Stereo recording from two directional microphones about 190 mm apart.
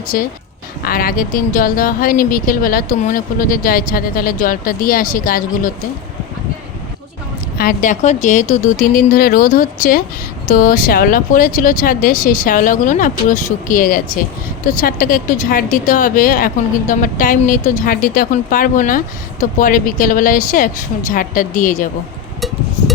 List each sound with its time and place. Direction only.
0.1 s speech: 50° left (ahead or behind)
7.6 s speech: 45° left (ahead or behind)